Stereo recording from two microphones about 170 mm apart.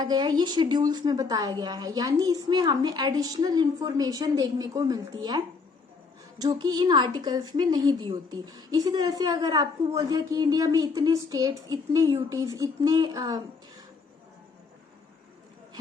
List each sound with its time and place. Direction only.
0.0 s a woman's voice: 25° right (ahead or behind)
6.4 s a woman's voice: 25° right (ahead or behind)